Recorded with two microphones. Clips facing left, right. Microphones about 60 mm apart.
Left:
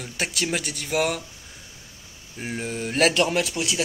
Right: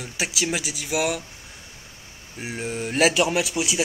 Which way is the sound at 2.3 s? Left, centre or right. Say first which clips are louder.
Even; centre.